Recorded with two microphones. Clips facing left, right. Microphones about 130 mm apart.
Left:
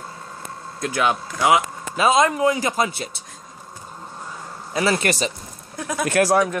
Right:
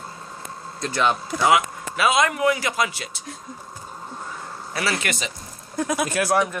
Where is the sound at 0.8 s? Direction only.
10° left (ahead or behind).